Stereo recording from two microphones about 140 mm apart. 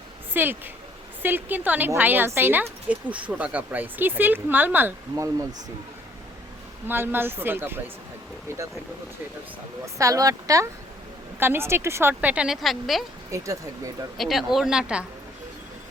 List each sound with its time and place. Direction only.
0.3 s a woman's voice: 15° right (ahead or behind)
6.8 s a woman's voice: 15° right (ahead or behind)
9.8 s a woman's voice: 25° right (ahead or behind); by 13.1 s centre (ahead or behind)
13.3 s speech: 25° right (ahead or behind)
14.2 s speech: centre (ahead or behind)